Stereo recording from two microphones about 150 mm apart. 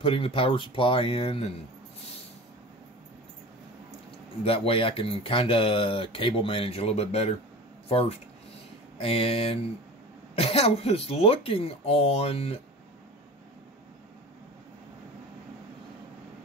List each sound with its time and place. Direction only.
0.0 s speech: 35° left (ahead or behind)
4.5 s speech: 40° left (ahead or behind)